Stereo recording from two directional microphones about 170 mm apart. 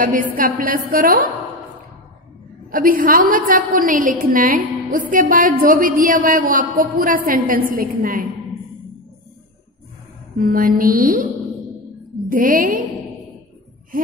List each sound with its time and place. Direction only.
0.0 s a woman's voice: 50° right (ahead or behind)
2.7 s a woman's voice: 55° right (ahead or behind)
10.3 s a woman's voice: 55° right (ahead or behind)
12.3 s a woman's voice: 55° right (ahead or behind)